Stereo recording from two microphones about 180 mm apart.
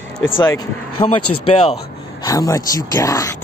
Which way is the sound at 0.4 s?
25° left (ahead or behind).